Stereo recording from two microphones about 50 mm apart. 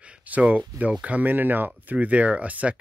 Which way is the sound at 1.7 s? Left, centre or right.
Right.